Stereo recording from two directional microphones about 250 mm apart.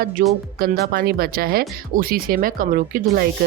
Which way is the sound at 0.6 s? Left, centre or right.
Right.